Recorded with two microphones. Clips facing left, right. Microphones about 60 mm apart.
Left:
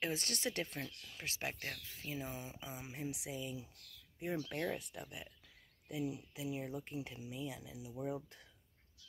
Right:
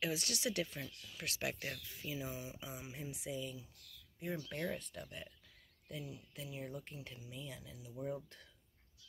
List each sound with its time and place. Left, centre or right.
0.0 s speech: left
1.1 s speech: left
3.3 s speech: centre